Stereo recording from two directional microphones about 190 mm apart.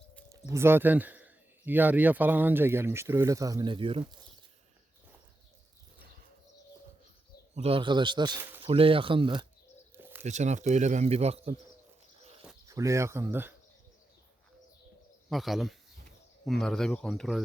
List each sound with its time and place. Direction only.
0.3 s speech: 15° right (ahead or behind)
7.5 s speech: 30° right (ahead or behind)
8.4 s speech: 10° right (ahead or behind)
8.6 s speech: 30° right (ahead or behind)
10.0 s bird: 10° right (ahead or behind)
10.2 s speech: 40° right (ahead or behind)
12.6 s speech: 15° right (ahead or behind)
15.3 s speech: centre (ahead or behind)